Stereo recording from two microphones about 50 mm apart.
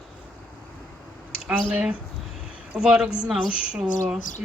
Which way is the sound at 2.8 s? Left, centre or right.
Centre.